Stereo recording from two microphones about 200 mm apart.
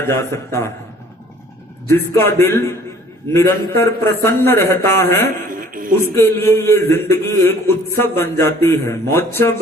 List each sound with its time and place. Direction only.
0.0 s speech: 15° left (ahead or behind)
1.9 s speech: 10° left (ahead or behind)
5.5 s music: 45° right (ahead or behind)
6.1 s speech: 10° left (ahead or behind)